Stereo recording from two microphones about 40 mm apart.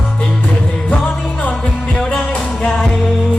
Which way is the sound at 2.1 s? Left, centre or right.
Left.